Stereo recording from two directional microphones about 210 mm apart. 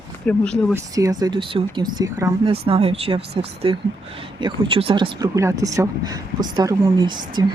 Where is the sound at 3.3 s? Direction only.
50° right (ahead or behind).